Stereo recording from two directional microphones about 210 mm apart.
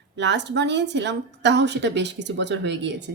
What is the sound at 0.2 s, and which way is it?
Speech, 55° right (ahead or behind).